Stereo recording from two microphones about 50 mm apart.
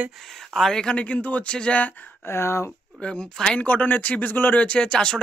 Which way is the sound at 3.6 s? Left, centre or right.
Left.